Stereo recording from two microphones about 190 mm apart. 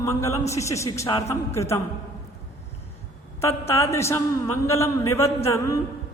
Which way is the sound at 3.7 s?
15° left (ahead or behind).